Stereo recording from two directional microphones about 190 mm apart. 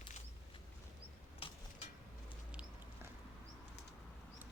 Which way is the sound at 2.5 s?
5° right (ahead or behind).